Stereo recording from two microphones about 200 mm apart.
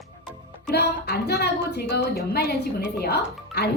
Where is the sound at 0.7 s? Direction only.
55° left (ahead or behind).